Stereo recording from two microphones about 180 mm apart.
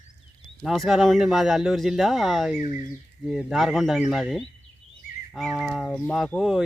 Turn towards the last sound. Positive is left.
turn(degrees=0)  # may be behind; listen again after turning